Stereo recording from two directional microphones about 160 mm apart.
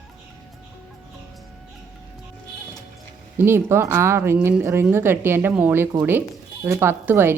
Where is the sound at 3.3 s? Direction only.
15° right (ahead or behind).